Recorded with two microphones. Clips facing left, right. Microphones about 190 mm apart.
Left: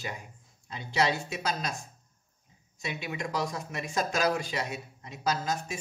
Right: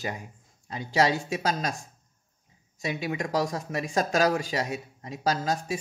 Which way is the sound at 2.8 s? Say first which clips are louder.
Right 5 dB; 40° right (ahead or behind).